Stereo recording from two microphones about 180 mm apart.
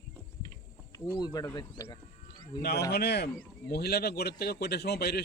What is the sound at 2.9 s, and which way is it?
A man's voice, 65° left (ahead or behind).